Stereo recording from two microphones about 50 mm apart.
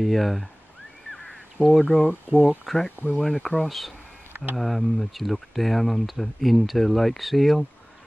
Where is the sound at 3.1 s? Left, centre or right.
Centre.